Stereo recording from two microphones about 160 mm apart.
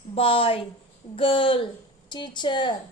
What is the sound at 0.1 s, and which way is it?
A woman's voice, 35° left (ahead or behind).